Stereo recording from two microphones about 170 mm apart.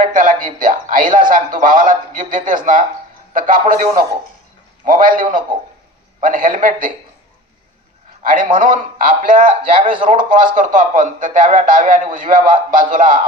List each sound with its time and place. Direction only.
0.0 s a man's voice: 50° right (ahead or behind)
6.2 s a man's voice: 50° right (ahead or behind)
8.2 s a man's voice: 50° right (ahead or behind)